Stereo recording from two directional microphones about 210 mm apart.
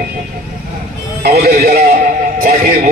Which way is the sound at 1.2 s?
45° right (ahead or behind).